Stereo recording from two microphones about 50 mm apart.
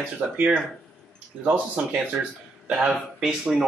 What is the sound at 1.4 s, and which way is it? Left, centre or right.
Speech, right.